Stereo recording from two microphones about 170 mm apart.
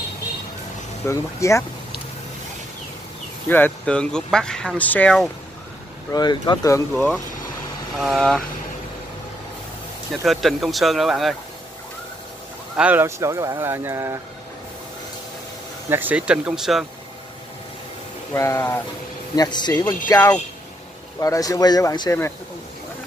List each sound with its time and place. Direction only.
1.0 s speech: 15° left (ahead or behind)
3.4 s speech: 10° left (ahead or behind)
6.1 s speech: 25° left (ahead or behind)
6.9 s speech: 5° left (ahead or behind)
10.2 s speech: centre (ahead or behind)
12.7 s speech: 10° right (ahead or behind)
15.9 s speech: 10° right (ahead or behind)
18.3 s speech: 15° left (ahead or behind)